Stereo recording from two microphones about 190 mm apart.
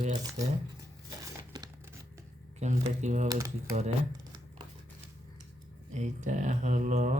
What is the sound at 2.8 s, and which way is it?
Speech, 40° right (ahead or behind).